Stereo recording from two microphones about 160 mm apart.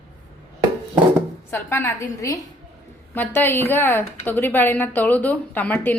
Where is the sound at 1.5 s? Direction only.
15° left (ahead or behind).